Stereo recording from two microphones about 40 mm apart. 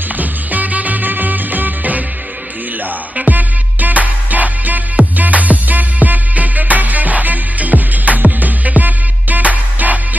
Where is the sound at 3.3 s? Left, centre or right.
Right.